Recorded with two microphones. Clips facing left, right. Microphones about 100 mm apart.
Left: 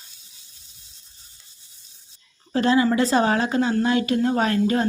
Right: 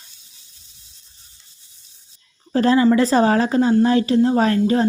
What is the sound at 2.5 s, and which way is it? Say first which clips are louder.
A woman's voice: right 4 dB; 40° right (ahead or behind).